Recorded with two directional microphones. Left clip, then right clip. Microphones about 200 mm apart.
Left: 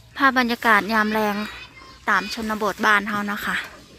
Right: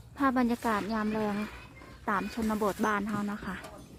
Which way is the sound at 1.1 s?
30° left (ahead or behind).